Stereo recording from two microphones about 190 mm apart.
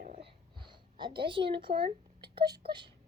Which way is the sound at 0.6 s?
25° right (ahead or behind).